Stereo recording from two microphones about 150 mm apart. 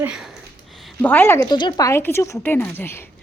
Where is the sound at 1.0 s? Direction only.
15° left (ahead or behind).